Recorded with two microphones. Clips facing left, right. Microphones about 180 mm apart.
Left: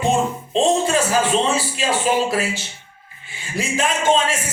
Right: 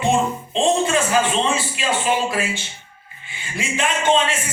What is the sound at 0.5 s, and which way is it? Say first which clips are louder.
A woman's voice: left 1 dB; 35° left (ahead or behind).